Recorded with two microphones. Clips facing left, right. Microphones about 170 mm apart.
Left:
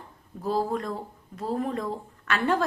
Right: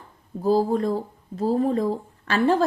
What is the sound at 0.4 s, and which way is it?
A woman's voice, 30° right (ahead or behind).